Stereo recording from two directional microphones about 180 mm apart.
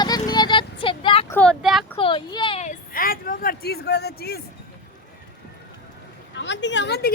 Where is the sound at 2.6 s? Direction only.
50° left (ahead or behind).